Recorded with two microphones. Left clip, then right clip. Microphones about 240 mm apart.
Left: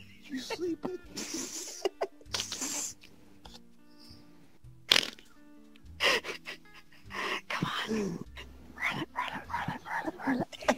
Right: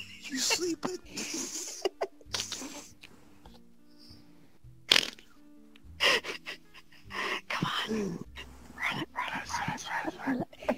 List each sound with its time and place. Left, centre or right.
0.0 s speech: right
1.1 s a sound: centre
2.6 s a sound: left
4.8 s music: centre
5.9 s gasp: centre
7.9 s dog: centre
8.4 s dog: centre
9.5 s whispering: centre
10.4 s a sound: left